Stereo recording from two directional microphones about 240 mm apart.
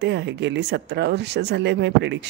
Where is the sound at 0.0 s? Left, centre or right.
Right.